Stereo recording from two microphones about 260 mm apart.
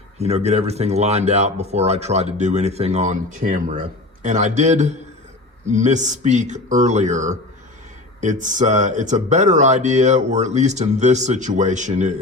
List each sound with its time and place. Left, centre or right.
0.2 s speech: right